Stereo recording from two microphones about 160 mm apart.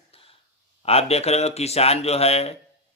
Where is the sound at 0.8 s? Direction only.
40° left (ahead or behind).